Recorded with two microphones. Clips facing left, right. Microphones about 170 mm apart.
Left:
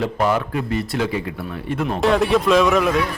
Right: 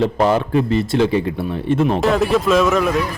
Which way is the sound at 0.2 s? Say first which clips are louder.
Right 3 dB; 25° right (ahead or behind).